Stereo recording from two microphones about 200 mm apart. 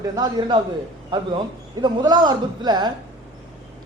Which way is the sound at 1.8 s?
20° right (ahead or behind).